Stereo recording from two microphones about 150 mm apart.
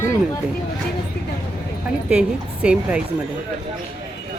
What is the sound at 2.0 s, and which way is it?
Speech, 5° right (ahead or behind).